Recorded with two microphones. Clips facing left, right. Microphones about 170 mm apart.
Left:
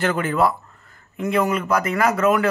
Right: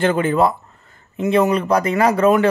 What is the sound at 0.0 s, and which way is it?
Speech, 25° right (ahead or behind).